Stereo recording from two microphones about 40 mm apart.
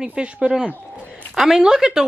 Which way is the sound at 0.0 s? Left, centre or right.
Right.